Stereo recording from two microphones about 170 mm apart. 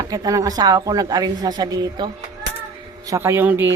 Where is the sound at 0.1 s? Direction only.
20° right (ahead or behind).